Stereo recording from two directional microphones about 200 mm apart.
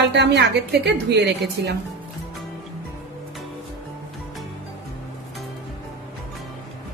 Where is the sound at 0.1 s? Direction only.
60° right (ahead or behind).